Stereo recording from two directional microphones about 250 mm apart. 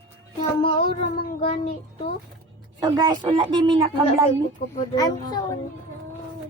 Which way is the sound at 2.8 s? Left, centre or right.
Centre.